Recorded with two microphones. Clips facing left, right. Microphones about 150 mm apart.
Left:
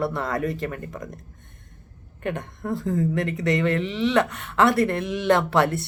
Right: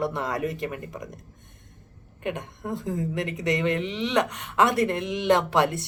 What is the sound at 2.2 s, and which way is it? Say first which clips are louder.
Speech: left 2 dB; 15° right (ahead or behind).